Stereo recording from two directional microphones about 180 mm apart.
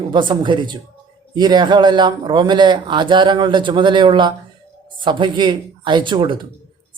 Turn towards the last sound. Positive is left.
turn(degrees=-25)  # may be behind; listen again after turning